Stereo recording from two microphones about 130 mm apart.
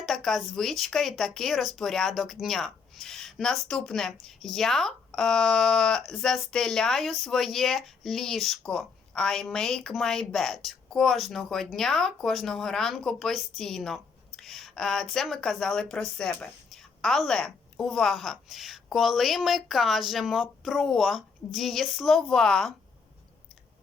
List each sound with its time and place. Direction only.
0.0 s a woman's voice: centre (ahead or behind)